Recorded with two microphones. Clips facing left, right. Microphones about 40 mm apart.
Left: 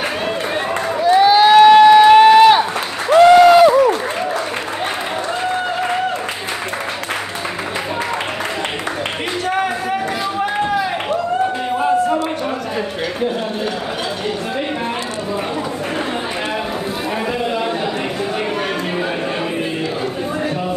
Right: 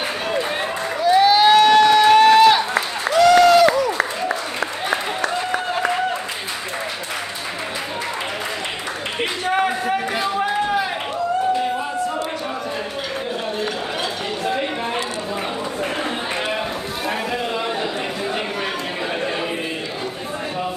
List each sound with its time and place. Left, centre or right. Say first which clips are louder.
0.9 s run: left 3 dB; centre
3.1 s applause: left 5 dB; left